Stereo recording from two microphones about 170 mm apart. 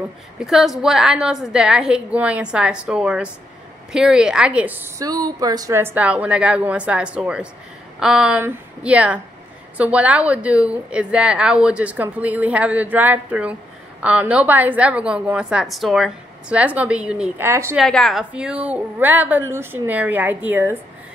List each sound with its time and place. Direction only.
0.4 s a woman's voice: centre (ahead or behind)
17.7 s a woman's voice: centre (ahead or behind)